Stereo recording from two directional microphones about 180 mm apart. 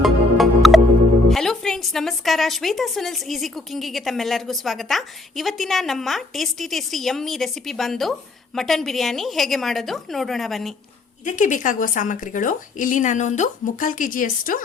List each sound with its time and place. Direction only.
0.0 s music: centre (ahead or behind)
1.3 s a woman's voice: centre (ahead or behind)
11.3 s a woman's voice: 45° left (ahead or behind)